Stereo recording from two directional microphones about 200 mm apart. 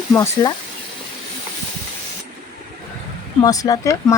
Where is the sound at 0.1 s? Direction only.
15° left (ahead or behind).